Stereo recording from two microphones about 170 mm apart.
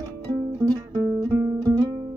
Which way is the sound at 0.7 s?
25° right (ahead or behind).